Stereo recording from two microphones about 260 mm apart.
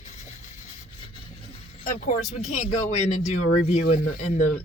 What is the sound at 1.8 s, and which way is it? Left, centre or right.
Speech, left.